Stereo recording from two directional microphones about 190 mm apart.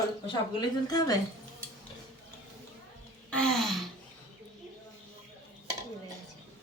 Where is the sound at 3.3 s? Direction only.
5° left (ahead or behind).